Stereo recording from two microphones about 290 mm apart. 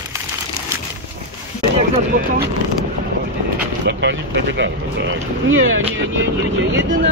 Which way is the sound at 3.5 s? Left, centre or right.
Right.